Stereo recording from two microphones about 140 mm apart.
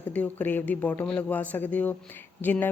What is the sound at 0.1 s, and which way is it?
A woman's voice, 10° left (ahead or behind).